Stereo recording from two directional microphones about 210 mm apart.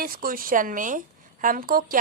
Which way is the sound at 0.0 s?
45° right (ahead or behind).